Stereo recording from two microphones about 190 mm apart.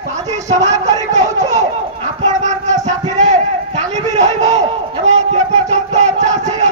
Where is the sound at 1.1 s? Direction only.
40° right (ahead or behind).